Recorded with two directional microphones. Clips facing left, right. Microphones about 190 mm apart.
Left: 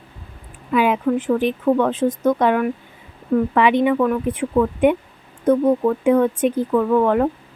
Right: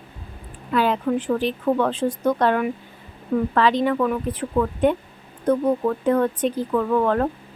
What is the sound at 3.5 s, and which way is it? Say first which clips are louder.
Speech: left 2 dB; 15° left (ahead or behind).